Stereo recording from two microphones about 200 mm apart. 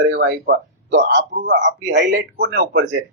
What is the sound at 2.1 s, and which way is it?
Speech, 45° right (ahead or behind).